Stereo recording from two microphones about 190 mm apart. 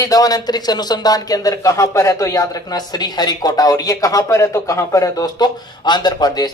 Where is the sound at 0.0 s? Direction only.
20° left (ahead or behind).